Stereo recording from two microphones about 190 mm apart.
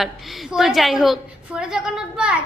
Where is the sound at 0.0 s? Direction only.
Centre (ahead or behind).